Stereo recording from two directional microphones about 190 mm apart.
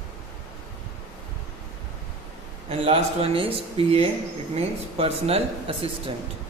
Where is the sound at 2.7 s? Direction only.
30° right (ahead or behind).